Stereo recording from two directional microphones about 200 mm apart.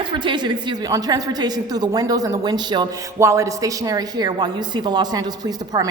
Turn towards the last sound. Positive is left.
turn(degrees=-20)  # may be behind; listen again after turning